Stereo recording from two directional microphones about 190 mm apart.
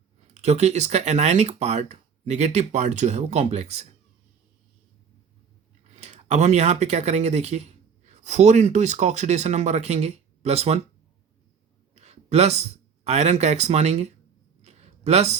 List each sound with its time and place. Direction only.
0.4 s speech: 35° right (ahead or behind)
6.0 s speech: 35° right (ahead or behind)
11.9 s speech: 35° right (ahead or behind)
14.6 s a sound: 35° right (ahead or behind)